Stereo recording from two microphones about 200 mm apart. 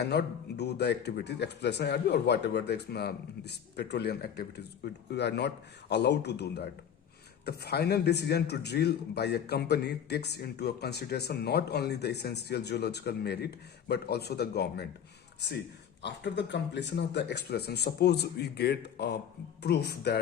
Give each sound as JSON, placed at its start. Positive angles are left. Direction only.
{"t": 0.0, "sound": "a man's voice", "side_deg": 55}
{"t": 16.0, "sound": "a man's voice", "side_deg": 60}